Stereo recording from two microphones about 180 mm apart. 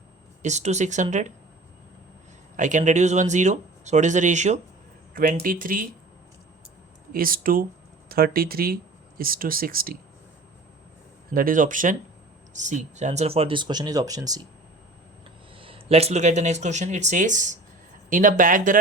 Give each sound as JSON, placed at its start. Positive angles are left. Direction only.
{"t": 0.4, "sound": "speech", "side_deg": -40}
{"t": 2.6, "sound": "speech", "side_deg": -45}
{"t": 5.1, "sound": "speech", "side_deg": -50}
{"t": 7.1, "sound": "speech", "side_deg": -55}
{"t": 11.3, "sound": "speech", "side_deg": -50}
{"t": 15.5, "sound": "speech", "side_deg": -30}